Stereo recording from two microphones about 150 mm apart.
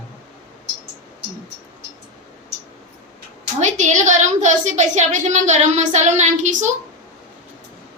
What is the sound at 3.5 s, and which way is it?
A woman's voice, 55° right (ahead or behind).